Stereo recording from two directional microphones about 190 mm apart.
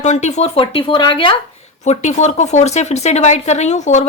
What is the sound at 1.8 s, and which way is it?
Speech, 40° left (ahead or behind).